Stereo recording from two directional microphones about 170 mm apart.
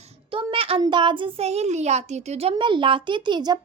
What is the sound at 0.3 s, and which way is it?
A child's voice, 30° right (ahead or behind).